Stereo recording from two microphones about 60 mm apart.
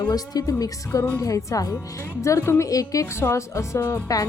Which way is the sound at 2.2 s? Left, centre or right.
Left.